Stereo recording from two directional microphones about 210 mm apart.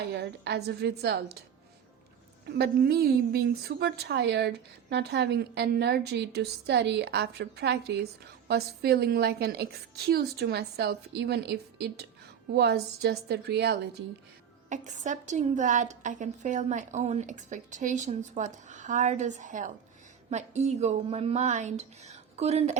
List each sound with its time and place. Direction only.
0.1 s a woman's voice: 50° right (ahead or behind)
2.5 s a woman's voice: 50° right (ahead or behind)
14.7 s a woman's voice: 35° right (ahead or behind)